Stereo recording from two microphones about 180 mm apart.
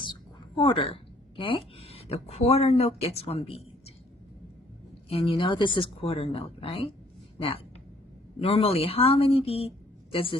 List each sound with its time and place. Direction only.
0.0 s a sound: 25° left (ahead or behind)
1.4 s speech: 30° left (ahead or behind)
5.0 s a woman's voice: 30° left (ahead or behind)